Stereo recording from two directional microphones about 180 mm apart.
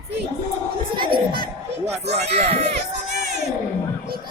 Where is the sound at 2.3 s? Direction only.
35° right (ahead or behind).